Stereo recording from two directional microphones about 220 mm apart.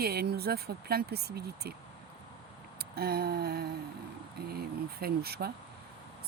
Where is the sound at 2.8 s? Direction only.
45° right (ahead or behind).